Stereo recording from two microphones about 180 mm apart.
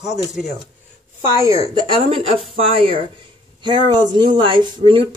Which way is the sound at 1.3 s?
15° right (ahead or behind).